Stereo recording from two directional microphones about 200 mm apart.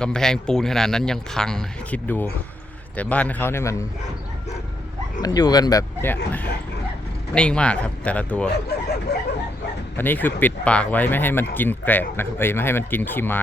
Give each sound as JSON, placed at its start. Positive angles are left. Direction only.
{"t": 0.0, "sound": "speech", "side_deg": 5}
{"t": 5.2, "sound": "speech", "side_deg": 20}
{"t": 7.3, "sound": "speech", "side_deg": 5}
{"t": 8.5, "sound": "a sound", "side_deg": 55}
{"t": 10.0, "sound": "speech", "side_deg": 10}